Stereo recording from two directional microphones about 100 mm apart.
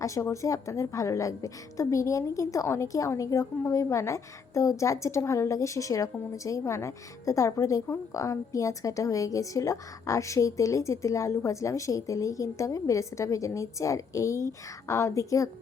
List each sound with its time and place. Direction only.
0.0 s a woman's voice: 30° left (ahead or behind)